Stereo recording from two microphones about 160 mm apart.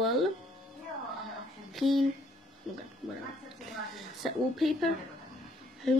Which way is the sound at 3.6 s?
Centre (ahead or behind).